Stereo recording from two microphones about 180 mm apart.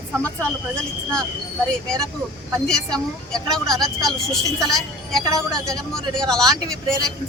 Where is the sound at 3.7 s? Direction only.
Centre (ahead or behind).